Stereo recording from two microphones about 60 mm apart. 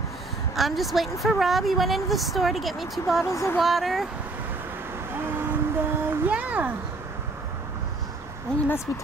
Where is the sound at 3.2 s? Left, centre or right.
Left.